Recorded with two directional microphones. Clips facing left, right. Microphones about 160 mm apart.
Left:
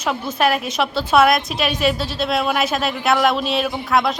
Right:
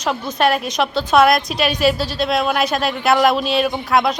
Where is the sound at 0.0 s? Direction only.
5° left (ahead or behind).